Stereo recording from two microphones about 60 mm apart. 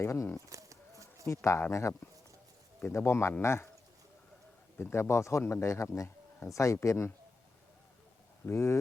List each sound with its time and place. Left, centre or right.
0.0 s speech: left
0.5 s a sound: right
1.3 s speech: left
1.7 s speech: left
4.8 s speech: left
8.4 s speech: left